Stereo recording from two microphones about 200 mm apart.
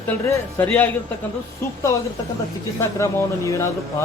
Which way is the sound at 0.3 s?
10° left (ahead or behind).